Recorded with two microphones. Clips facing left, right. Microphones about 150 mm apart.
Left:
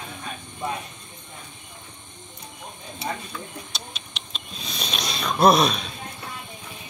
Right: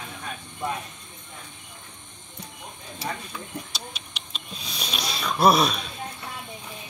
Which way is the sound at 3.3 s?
10° right (ahead or behind).